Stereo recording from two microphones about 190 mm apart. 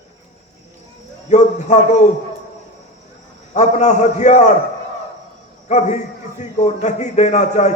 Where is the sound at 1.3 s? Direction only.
40° left (ahead or behind).